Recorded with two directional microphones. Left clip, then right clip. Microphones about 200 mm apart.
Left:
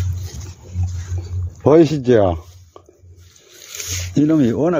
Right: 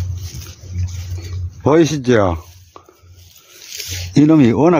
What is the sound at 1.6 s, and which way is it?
Speech, 10° right (ahead or behind).